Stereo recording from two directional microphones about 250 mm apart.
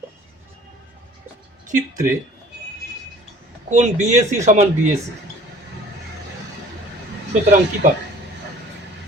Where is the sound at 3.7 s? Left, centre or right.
Right.